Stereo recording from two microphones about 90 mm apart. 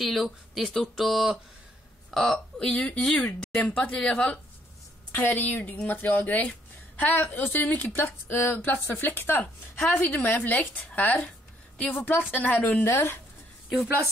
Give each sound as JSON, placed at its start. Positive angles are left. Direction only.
{"t": 0.0, "sound": "a woman's voice", "side_deg": 0}